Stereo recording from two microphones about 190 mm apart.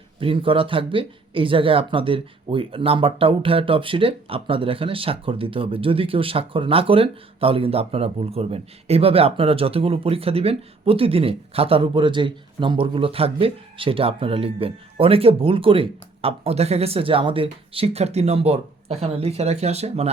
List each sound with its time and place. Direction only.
0.2 s speech: 30° right (ahead or behind)